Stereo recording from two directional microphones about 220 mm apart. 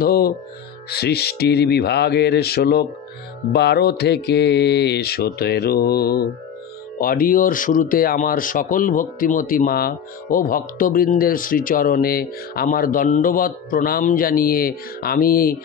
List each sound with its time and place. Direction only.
0.0 s music: 45° left (ahead or behind)
0.8 s speech: 45° left (ahead or behind)